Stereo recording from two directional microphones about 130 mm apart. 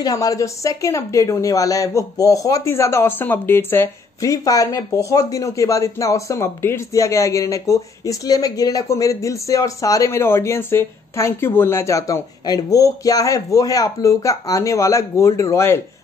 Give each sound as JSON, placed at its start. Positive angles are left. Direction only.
{"t": 0.0, "sound": "speech", "side_deg": 30}